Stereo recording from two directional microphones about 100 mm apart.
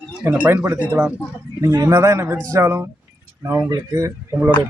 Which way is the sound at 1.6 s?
30° right (ahead or behind).